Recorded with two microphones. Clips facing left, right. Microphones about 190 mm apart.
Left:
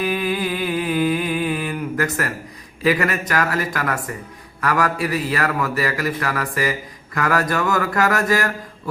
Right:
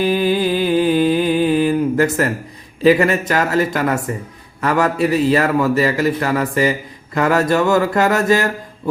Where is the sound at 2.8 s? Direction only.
25° right (ahead or behind).